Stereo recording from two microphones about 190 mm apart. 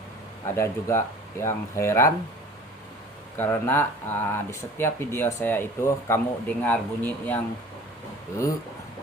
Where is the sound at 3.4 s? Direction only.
10° left (ahead or behind).